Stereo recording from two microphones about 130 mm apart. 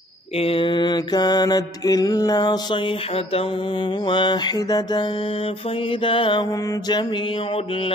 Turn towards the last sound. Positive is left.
turn(degrees=45)  # may be behind; listen again after turning